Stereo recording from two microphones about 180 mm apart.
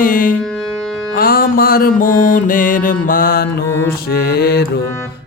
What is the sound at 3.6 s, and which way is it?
Mantra, 15° left (ahead or behind).